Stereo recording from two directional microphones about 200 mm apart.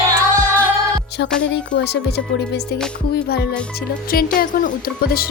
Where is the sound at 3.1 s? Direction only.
50° left (ahead or behind).